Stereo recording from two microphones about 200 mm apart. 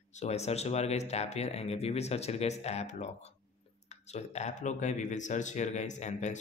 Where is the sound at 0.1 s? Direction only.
35° left (ahead or behind).